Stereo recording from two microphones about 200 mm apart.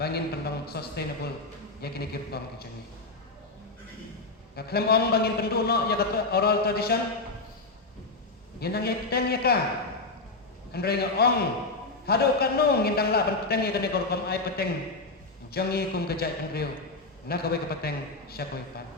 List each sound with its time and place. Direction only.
0.0 s a man's voice: 50° left (ahead or behind)
4.5 s a man's voice: 50° left (ahead or behind)
8.6 s a man's voice: 50° left (ahead or behind)
10.7 s a man's voice: 50° left (ahead or behind)